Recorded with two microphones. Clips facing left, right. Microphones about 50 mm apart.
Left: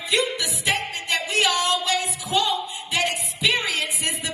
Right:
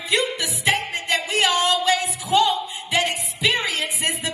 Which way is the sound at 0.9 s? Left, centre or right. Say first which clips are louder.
Right 1 dB; right.